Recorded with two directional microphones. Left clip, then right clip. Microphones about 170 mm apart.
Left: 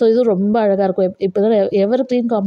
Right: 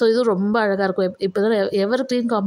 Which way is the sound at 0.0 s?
10° left (ahead or behind).